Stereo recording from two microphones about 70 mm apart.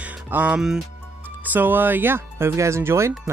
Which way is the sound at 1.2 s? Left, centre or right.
Right.